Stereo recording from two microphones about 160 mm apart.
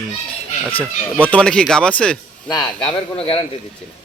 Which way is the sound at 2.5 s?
25° left (ahead or behind).